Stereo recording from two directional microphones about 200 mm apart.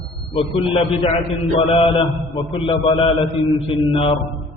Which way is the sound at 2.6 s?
25° left (ahead or behind).